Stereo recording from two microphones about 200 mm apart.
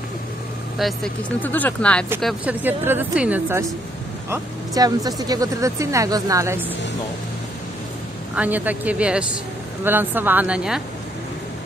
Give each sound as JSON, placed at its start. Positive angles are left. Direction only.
{"t": 0.7, "sound": "speech", "side_deg": 0}
{"t": 2.4, "sound": "speech", "side_deg": -10}
{"t": 8.4, "sound": "speech", "side_deg": -10}